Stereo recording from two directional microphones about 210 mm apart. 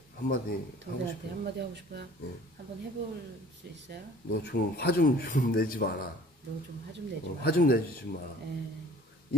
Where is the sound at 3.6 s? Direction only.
50° right (ahead or behind).